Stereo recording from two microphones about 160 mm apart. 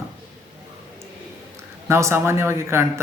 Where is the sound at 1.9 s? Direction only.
15° right (ahead or behind).